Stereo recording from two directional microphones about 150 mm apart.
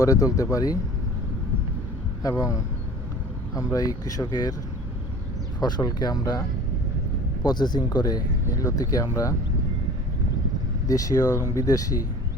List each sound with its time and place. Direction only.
0.0 s speech: 20° left (ahead or behind)
2.2 s speech: 25° left (ahead or behind)
5.5 s speech: 25° left (ahead or behind)
7.4 s speech: 30° left (ahead or behind)
10.8 s speech: 25° left (ahead or behind)